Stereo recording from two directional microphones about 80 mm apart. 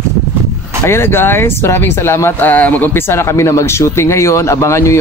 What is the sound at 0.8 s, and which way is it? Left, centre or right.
Speech, left.